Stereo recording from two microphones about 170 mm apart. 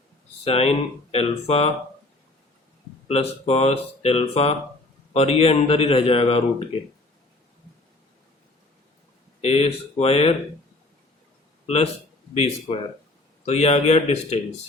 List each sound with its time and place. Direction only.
0.4 s speech: 35° left (ahead or behind)
3.1 s speech: 35° left (ahead or behind)
9.4 s speech: 35° left (ahead or behind)
11.6 s a man's voice: 35° left (ahead or behind)